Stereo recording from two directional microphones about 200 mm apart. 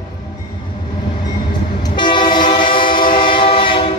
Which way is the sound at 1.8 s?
20° left (ahead or behind).